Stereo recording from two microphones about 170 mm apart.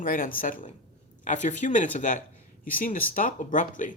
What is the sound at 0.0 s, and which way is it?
Speech, 55° left (ahead or behind).